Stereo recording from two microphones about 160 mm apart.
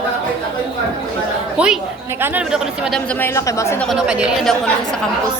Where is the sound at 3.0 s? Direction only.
10° left (ahead or behind).